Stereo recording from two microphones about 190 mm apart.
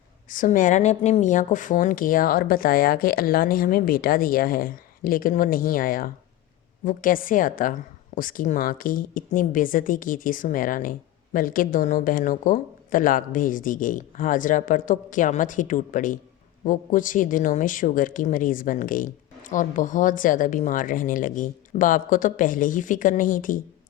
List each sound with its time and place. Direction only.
0.3 s speech: 45° left (ahead or behind)